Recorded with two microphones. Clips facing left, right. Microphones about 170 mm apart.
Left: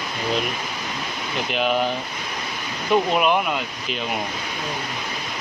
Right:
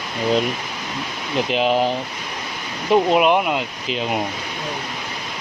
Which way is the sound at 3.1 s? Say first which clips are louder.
Right 4 dB; 20° right (ahead or behind).